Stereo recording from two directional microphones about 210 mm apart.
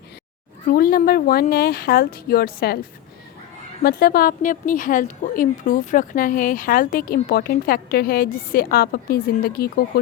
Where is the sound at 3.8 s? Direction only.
45° left (ahead or behind).